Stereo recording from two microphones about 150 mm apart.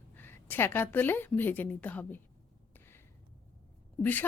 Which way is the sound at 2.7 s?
15° left (ahead or behind).